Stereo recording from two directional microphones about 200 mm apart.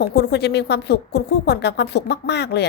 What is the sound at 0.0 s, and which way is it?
A woman's voice, 55° left (ahead or behind).